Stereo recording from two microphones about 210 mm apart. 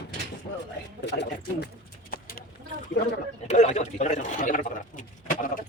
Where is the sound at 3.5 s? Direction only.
35° left (ahead or behind).